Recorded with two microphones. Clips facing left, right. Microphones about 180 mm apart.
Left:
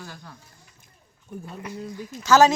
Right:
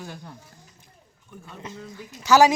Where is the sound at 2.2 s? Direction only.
15° right (ahead or behind).